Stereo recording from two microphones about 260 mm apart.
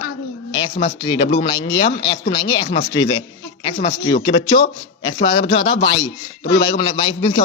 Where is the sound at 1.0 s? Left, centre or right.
Centre.